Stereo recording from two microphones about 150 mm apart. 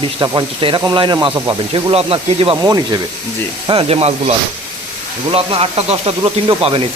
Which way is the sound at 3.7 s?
35° right (ahead or behind).